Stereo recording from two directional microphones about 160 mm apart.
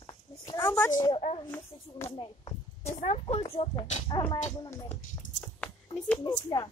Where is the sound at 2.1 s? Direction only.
30° left (ahead or behind).